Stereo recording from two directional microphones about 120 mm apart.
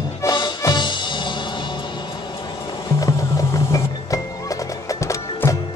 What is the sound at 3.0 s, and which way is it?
Music, 25° left (ahead or behind).